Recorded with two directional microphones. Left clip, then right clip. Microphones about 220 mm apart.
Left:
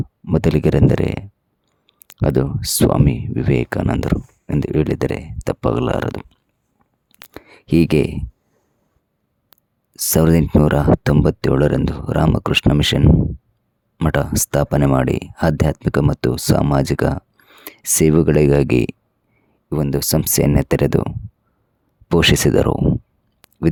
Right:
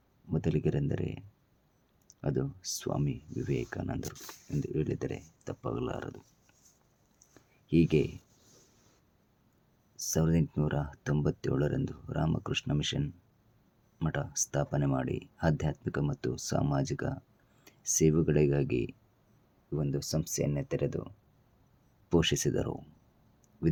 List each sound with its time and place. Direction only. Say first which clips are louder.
0.3 s speech: left 15 dB; 40° left (ahead or behind)
2.2 s speech: left 16 dB; 45° left (ahead or behind)
7.3 s a sound: left 12 dB; 45° left (ahead or behind)
9.9 s speech: left 16 dB; 45° left (ahead or behind)
22.1 s speech: left 15 dB; 40° left (ahead or behind)